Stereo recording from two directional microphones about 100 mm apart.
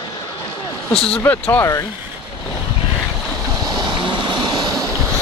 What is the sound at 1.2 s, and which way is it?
Speech, 25° left (ahead or behind).